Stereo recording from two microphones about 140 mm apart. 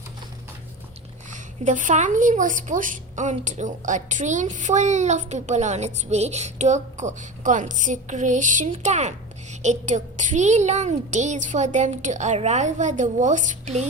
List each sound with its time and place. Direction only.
1.3 s a woman's voice: 65° right (ahead or behind)